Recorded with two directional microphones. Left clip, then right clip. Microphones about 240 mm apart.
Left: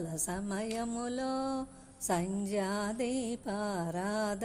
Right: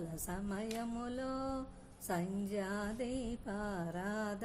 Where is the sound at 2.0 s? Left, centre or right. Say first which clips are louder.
Left 6 dB; left.